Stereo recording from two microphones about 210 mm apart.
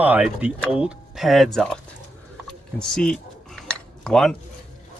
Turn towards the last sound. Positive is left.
turn(degrees=0)  # may be behind; listen again after turning